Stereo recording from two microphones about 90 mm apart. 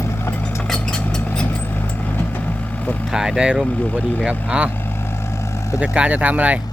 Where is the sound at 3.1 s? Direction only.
5° right (ahead or behind).